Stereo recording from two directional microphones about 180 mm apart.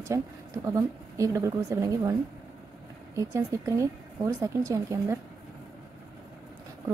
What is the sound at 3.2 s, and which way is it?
Speech, 15° right (ahead or behind).